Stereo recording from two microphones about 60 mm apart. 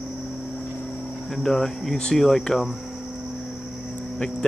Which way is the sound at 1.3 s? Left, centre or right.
Centre.